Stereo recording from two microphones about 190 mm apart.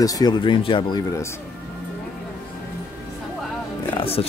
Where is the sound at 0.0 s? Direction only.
20° left (ahead or behind).